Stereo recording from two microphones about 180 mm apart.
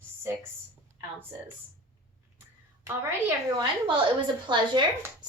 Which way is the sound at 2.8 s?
15° right (ahead or behind).